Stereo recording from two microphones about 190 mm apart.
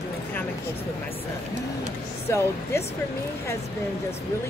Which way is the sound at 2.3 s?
15° left (ahead or behind).